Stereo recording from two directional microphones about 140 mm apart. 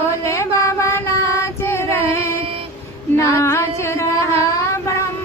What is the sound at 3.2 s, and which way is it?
Music, 20° left (ahead or behind).